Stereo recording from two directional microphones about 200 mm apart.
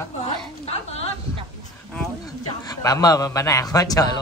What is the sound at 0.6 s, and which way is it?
Speech, 30° left (ahead or behind).